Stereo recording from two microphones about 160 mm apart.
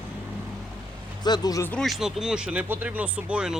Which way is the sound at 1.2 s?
25° left (ahead or behind).